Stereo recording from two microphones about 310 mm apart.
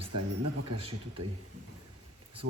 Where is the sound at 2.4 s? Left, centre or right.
Right.